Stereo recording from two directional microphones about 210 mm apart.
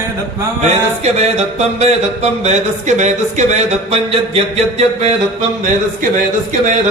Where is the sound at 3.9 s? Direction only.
30° right (ahead or behind).